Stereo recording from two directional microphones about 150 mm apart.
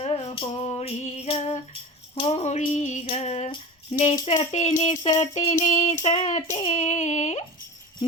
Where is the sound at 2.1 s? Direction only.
40° left (ahead or behind).